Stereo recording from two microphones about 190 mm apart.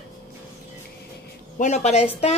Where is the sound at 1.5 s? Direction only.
35° left (ahead or behind).